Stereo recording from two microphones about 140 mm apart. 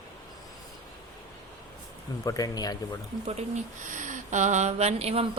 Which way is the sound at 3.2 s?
55° right (ahead or behind).